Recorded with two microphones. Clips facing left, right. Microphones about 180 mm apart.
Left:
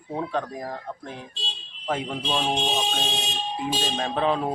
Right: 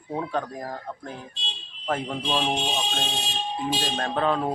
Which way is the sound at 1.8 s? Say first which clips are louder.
Even; 5° left (ahead or behind).